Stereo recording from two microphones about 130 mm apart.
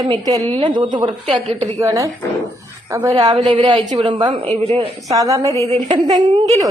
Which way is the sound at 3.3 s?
40° right (ahead or behind).